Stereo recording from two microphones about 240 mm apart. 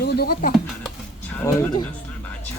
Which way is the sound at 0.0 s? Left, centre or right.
Left.